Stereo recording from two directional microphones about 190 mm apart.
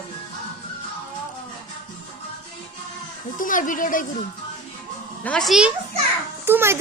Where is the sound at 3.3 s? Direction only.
45° left (ahead or behind).